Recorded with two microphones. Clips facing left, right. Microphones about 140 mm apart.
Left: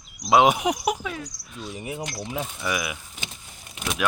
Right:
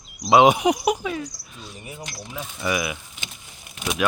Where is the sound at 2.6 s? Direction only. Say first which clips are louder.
Right 8 dB; centre (ahead or behind).